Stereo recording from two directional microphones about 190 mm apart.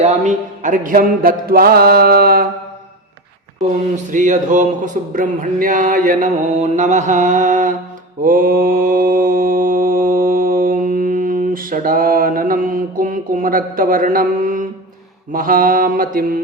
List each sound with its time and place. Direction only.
0.0 s speech: 40° right (ahead or behind)
3.9 s speech: 40° right (ahead or behind)
8.2 s mantra: 45° right (ahead or behind)
15.3 s speech: 45° right (ahead or behind)